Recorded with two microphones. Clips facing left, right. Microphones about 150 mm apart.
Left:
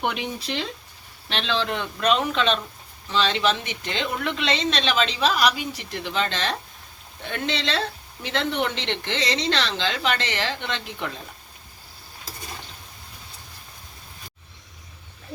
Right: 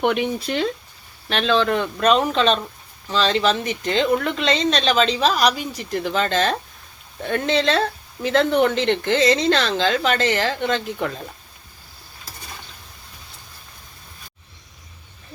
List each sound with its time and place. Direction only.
0.0 s a woman's voice: 55° right (ahead or behind)